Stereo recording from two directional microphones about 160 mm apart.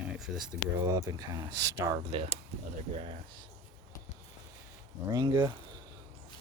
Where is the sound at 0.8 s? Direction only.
20° right (ahead or behind).